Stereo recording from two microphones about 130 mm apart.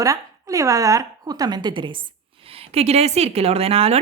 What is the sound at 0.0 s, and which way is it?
A woman's voice, 25° right (ahead or behind).